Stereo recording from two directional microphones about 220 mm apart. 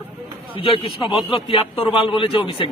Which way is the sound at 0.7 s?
25° left (ahead or behind).